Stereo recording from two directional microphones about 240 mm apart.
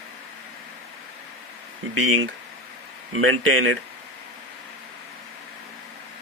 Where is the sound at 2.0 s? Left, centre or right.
Right.